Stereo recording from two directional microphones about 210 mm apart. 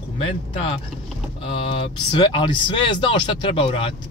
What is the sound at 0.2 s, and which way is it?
Speech, 25° left (ahead or behind).